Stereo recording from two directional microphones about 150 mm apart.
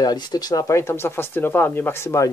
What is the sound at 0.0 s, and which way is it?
Speech, 25° left (ahead or behind).